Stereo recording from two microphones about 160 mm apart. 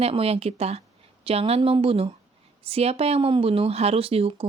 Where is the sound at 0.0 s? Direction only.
40° right (ahead or behind).